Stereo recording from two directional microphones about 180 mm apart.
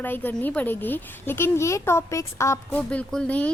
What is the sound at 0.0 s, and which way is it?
A woman's voice, 10° left (ahead or behind).